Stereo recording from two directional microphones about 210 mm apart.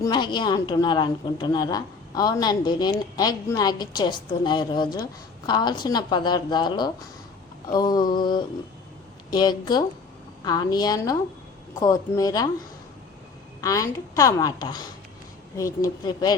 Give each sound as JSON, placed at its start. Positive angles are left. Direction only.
{"t": 0.0, "sound": "a woman's voice", "side_deg": 20}
{"t": 13.6, "sound": "a woman's voice", "side_deg": 15}